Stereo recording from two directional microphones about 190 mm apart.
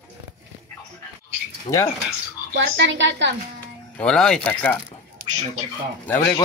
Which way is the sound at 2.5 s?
70° right (ahead or behind).